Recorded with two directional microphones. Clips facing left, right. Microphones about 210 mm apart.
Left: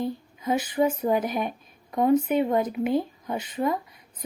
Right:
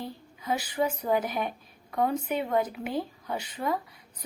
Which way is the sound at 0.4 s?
20° left (ahead or behind).